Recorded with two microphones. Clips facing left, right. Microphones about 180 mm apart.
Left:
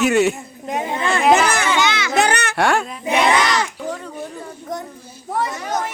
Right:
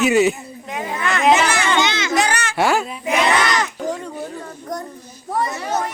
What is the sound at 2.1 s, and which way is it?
Speech, 60° left (ahead or behind).